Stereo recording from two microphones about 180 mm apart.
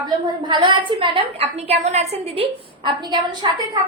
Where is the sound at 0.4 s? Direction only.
25° right (ahead or behind).